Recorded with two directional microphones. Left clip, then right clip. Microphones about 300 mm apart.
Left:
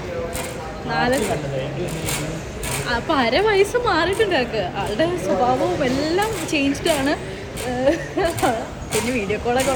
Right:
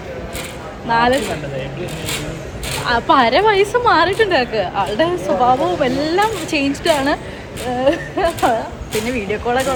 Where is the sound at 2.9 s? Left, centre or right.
Centre.